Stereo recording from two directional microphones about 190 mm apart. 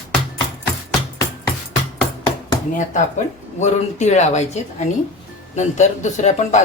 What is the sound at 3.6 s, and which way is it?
Speech, 35° left (ahead or behind).